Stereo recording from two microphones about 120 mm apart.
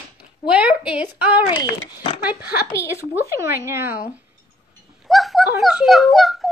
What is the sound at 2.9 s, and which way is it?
A woman's voice, 20° right (ahead or behind).